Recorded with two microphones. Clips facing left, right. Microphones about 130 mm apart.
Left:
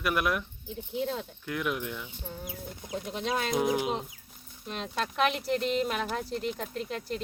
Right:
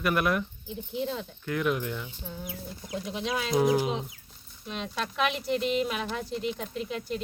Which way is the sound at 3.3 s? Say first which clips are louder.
Left 1 dB; 50° left (ahead or behind).